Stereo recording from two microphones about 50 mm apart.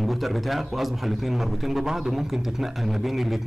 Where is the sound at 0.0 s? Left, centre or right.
Centre.